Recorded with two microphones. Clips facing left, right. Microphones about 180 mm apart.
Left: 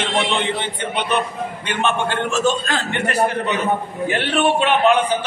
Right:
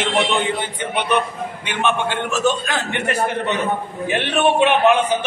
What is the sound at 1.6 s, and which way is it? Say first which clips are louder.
A man's voice: even; 15° right (ahead or behind).